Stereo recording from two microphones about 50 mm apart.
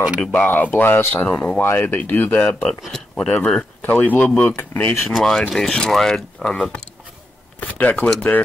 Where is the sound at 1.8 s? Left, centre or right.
Left.